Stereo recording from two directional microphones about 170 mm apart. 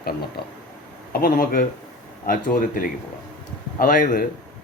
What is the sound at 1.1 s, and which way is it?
Speech, 60° left (ahead or behind).